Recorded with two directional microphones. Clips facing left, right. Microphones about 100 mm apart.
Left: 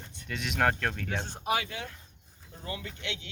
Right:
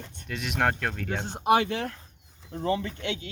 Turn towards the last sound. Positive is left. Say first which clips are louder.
# right 11 dB
turn(degrees=-65)  # may be behind; listen again after turning